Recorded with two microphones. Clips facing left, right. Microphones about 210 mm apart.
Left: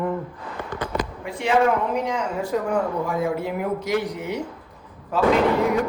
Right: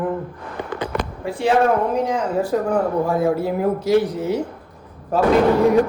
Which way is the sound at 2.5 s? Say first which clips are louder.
Right 2 dB; 30° right (ahead or behind).